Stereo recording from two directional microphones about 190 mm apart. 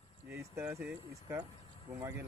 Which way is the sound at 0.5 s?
15° right (ahead or behind).